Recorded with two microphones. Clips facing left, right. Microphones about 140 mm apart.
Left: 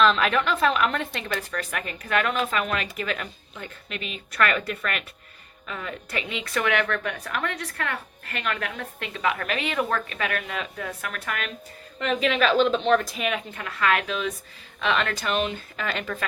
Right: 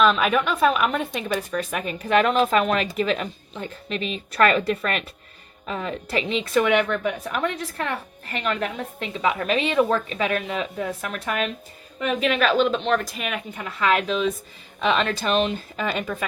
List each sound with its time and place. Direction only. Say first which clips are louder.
0.0 s speech: right 2 dB; 10° right (ahead or behind)
2.2 s a woman's voice: right 6 dB; 35° right (ahead or behind)
11.9 s a woman's voice: right 1 dB; 10° right (ahead or behind)
13.5 s a woman's voice: right 6 dB; 20° right (ahead or behind)